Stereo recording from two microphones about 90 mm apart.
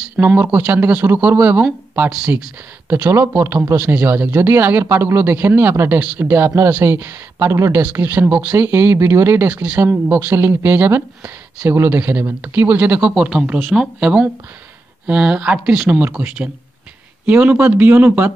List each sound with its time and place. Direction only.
0.1 s speech: 20° right (ahead or behind)
2.0 s speech: 5° right (ahead or behind)
2.9 s speech: 25° right (ahead or behind)
9.5 s speech: 15° right (ahead or behind)
15.9 s speech: 20° right (ahead or behind)